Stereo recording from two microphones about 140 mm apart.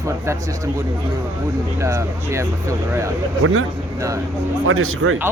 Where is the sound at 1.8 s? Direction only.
20° right (ahead or behind).